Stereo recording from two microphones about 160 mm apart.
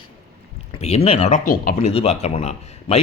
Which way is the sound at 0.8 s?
40° left (ahead or behind).